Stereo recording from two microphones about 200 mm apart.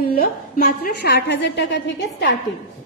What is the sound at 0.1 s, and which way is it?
A woman's voice, 50° left (ahead or behind).